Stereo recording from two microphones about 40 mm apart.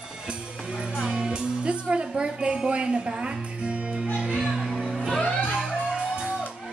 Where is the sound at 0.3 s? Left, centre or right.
Centre.